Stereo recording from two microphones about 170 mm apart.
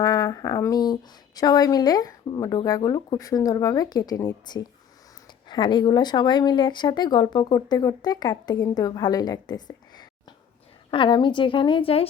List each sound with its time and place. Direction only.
0.0 s speech: 20° left (ahead or behind)